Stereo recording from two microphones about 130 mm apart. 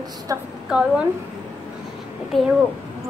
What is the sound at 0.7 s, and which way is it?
Speech, 5° right (ahead or behind).